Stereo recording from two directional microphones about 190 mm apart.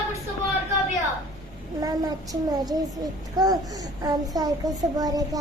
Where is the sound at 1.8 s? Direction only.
20° right (ahead or behind).